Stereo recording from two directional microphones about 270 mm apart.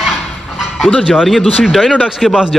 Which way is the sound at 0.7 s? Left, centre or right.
Centre.